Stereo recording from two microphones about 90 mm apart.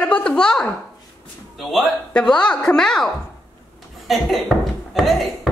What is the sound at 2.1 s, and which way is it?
Speech, 10° left (ahead or behind).